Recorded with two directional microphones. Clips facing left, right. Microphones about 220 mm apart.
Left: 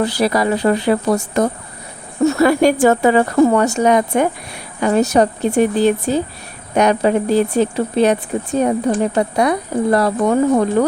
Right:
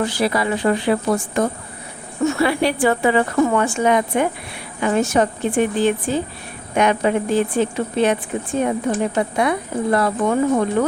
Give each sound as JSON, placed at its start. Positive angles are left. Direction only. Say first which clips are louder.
{"t": 0.0, "sound": "speech", "louder": "left 3 dB", "side_deg": 40}